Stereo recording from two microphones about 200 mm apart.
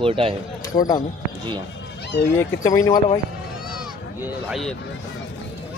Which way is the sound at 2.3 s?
15° left (ahead or behind).